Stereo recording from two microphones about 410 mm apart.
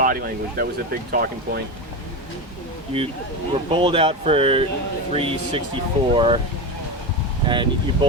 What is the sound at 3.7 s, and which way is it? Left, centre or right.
Speech, centre.